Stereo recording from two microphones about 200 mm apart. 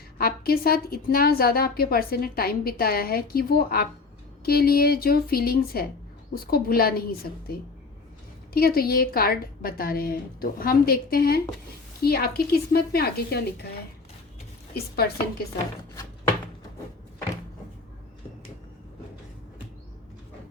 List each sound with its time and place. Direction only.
0.2 s a woman's voice: 50° left (ahead or behind)
8.5 s a woman's voice: 50° left (ahead or behind)
14.7 s a woman's voice: 50° left (ahead or behind)